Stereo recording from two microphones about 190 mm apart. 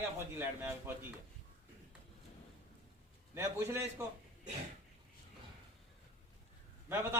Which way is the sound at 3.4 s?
15° right (ahead or behind).